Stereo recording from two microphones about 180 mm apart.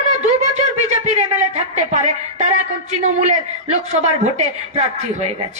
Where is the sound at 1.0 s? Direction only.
40° right (ahead or behind).